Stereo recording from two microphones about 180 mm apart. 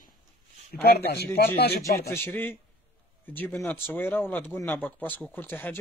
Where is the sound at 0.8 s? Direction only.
60° left (ahead or behind).